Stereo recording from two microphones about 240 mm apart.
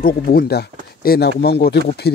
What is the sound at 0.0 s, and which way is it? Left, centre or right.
Speech, left.